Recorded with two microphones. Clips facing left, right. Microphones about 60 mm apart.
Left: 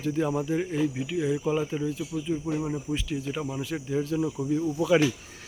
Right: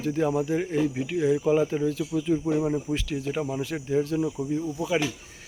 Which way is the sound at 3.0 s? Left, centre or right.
Right.